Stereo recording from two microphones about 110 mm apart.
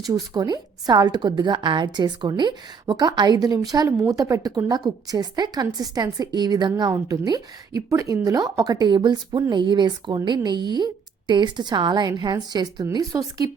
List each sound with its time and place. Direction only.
0.0 s a woman's voice: 35° right (ahead or behind)